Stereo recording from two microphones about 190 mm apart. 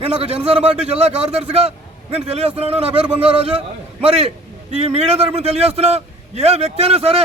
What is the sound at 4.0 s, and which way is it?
A man's voice, 30° right (ahead or behind).